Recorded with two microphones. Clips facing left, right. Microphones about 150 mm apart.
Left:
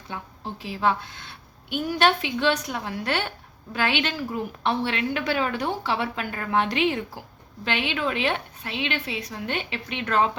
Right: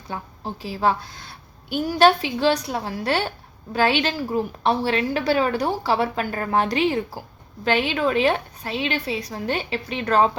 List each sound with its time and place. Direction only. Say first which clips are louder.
0.1 s a woman's voice: right 3 dB; 35° right (ahead or behind)